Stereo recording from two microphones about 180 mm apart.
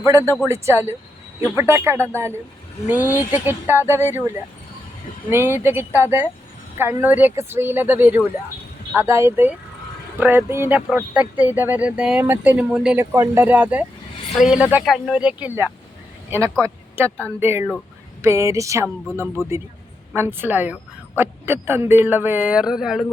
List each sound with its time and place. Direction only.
0.0 s speech: 15° right (ahead or behind)
5.3 s speech: 15° right (ahead or behind)
19.4 s speech: 20° left (ahead or behind)
20.1 s speech: 10° right (ahead or behind)